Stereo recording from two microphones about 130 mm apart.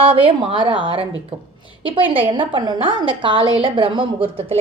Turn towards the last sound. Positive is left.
turn(degrees=-45)  # may be behind; listen again after turning